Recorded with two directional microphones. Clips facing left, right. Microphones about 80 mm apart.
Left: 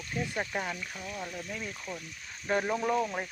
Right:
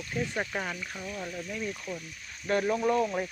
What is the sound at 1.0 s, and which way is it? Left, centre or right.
Speech, centre.